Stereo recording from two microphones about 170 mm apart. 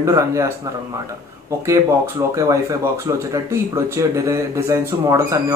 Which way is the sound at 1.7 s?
20° right (ahead or behind).